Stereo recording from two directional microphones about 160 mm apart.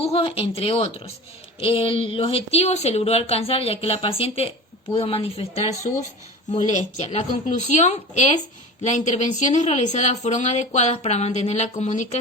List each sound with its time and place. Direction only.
0.0 s speech: 40° left (ahead or behind)